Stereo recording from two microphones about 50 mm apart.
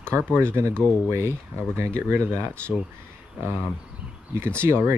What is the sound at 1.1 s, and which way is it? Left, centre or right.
Speech, right.